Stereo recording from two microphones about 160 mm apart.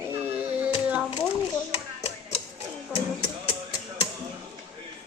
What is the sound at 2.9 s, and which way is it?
Music, 10° right (ahead or behind).